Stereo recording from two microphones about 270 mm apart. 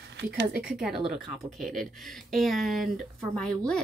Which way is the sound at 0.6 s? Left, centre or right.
Centre.